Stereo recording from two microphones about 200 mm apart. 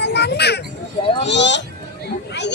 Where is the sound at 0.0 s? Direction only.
55° left (ahead or behind).